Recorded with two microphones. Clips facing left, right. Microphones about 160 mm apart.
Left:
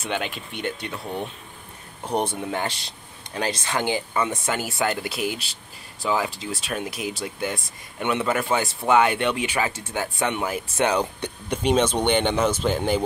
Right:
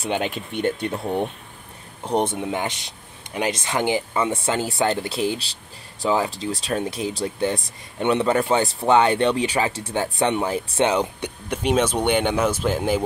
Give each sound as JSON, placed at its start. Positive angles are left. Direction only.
{"t": 0.2, "sound": "speech", "side_deg": -45}
{"t": 2.0, "sound": "speech", "side_deg": -20}
{"t": 11.5, "sound": "speech", "side_deg": -5}